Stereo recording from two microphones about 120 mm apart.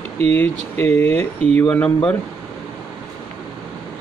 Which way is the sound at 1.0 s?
15° left (ahead or behind).